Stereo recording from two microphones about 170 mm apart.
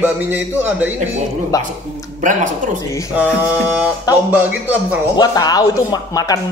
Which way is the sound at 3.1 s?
10° right (ahead or behind).